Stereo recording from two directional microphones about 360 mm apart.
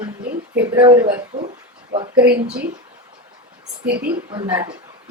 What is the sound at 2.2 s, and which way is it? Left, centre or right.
Speech, right.